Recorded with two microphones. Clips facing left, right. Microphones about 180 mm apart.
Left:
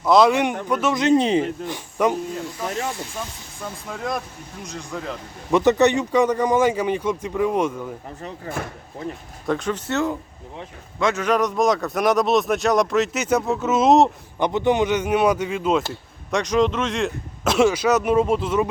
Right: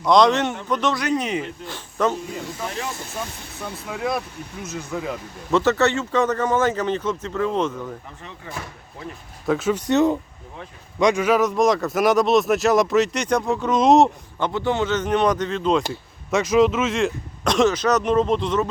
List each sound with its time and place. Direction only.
0.0 s speech: 5° left (ahead or behind)
0.9 s speech: 25° left (ahead or behind)
1.6 s speech: 15° left (ahead or behind)
3.6 s speech: 5° right (ahead or behind)
5.5 s speech: 15° left (ahead or behind)
8.2 s speech: 45° left (ahead or behind)
9.5 s speech: 5° right (ahead or behind)
14.3 s speech: 15° left (ahead or behind)
15.9 s speech: 5° right (ahead or behind)